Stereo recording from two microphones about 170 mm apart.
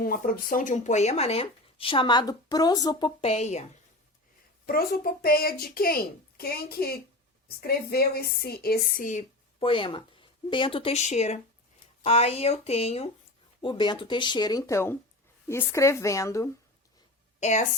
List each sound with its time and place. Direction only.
0.0 s speech: 55° left (ahead or behind); by 3.1 s 25° left (ahead or behind)
3.2 s speech: 40° left (ahead or behind)
4.6 s a child's voice: 60° left (ahead or behind)
9.6 s speech: 30° left (ahead or behind)
17.4 s a woman's voice: 45° left (ahead or behind)